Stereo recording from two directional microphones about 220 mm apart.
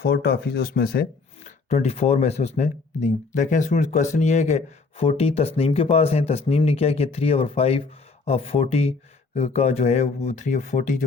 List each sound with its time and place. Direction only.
0.0 s speech: 45° left (ahead or behind)
1.5 s speech: 30° left (ahead or behind)